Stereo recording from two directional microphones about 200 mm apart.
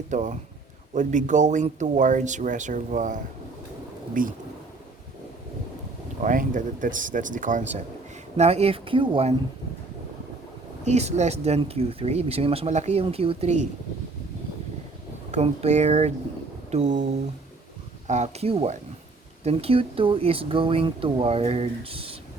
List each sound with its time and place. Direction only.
0.1 s speech: 35° right (ahead or behind)
6.2 s speech: 40° right (ahead or behind)
10.8 s speech: 35° right (ahead or behind)
15.3 s speech: 35° right (ahead or behind)
18.1 s speech: 35° right (ahead or behind)